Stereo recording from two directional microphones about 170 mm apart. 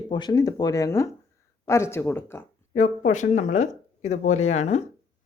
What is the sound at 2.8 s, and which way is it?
Speech, 45° left (ahead or behind).